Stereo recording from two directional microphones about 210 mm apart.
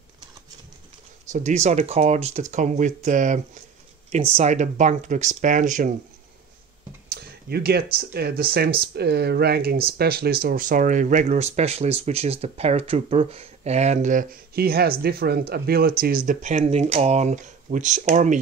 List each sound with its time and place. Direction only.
1.3 s speech: 35° right (ahead or behind)
4.4 s speech: 35° right (ahead or behind)
7.1 s speech: 50° right (ahead or behind)